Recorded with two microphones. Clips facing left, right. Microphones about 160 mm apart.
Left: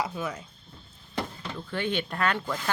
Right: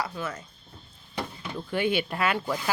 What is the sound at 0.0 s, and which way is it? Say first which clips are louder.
Speech: left 1 dB; 15° left (ahead or behind).